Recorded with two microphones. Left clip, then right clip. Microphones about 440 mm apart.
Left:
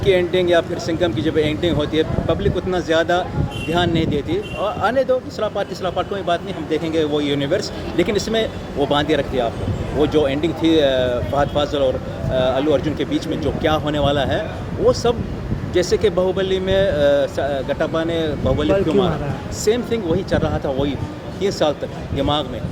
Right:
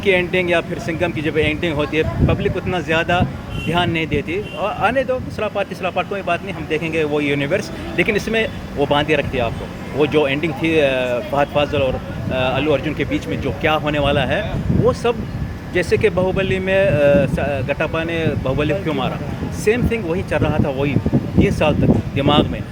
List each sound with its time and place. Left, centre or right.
0.1 s speech: right